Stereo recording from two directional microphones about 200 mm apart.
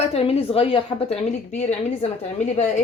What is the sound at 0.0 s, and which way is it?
A woman's voice, 30° left (ahead or behind).